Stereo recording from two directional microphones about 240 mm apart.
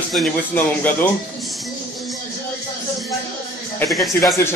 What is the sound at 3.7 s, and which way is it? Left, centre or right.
Speech, centre.